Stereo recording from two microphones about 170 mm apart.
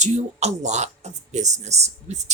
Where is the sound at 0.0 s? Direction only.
40° right (ahead or behind).